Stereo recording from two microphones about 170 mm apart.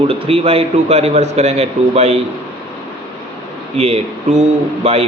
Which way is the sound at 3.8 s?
40° right (ahead or behind).